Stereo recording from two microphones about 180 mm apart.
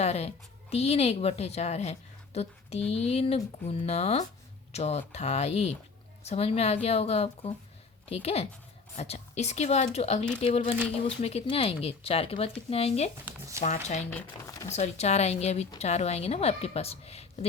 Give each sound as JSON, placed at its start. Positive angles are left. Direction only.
{"t": 0.0, "sound": "a woman's voice", "side_deg": 35}
{"t": 14.1, "sound": "speech", "side_deg": 15}
{"t": 14.7, "sound": "a woman's voice", "side_deg": 35}